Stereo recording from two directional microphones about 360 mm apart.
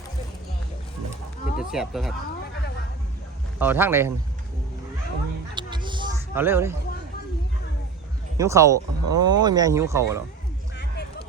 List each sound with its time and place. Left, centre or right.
1.5 s speech: centre
3.6 s speech: centre
5.5 s a sound: centre
8.4 s speech: centre
10.8 s music: left